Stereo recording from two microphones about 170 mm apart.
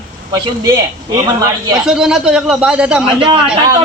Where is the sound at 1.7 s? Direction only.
5° right (ahead or behind).